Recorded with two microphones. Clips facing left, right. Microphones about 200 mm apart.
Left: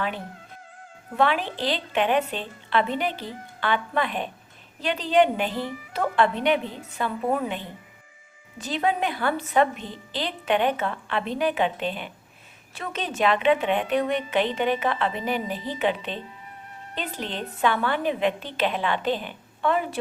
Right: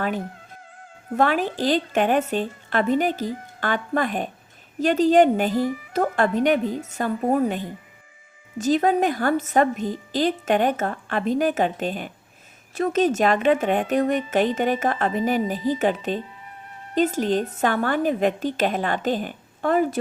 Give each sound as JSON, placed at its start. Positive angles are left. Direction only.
{"t": 1.1, "sound": "a woman's voice", "side_deg": -45}